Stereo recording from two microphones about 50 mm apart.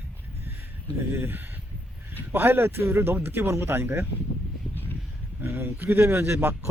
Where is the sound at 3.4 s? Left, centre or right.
Right.